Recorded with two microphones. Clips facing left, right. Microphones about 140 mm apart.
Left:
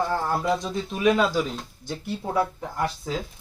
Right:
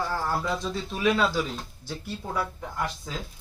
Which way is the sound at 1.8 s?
25° left (ahead or behind).